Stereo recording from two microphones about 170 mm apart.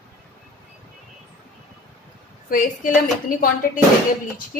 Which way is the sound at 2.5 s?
55° left (ahead or behind).